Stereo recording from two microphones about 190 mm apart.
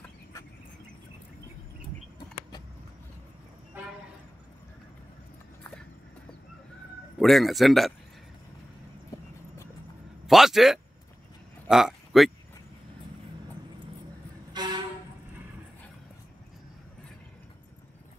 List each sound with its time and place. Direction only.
3.8 s train: 10° right (ahead or behind)
5.6 s a sound: 5° left (ahead or behind)
7.2 s a man's voice: centre (ahead or behind)
10.2 s speech: centre (ahead or behind)
11.6 s a sound: 5° right (ahead or behind)
14.5 s vehicle: 20° right (ahead or behind)